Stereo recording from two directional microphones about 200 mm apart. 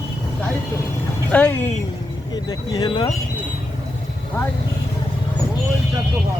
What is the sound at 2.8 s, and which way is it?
Speech, 25° left (ahead or behind).